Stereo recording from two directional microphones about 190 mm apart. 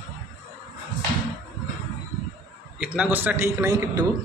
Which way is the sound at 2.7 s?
5° right (ahead or behind).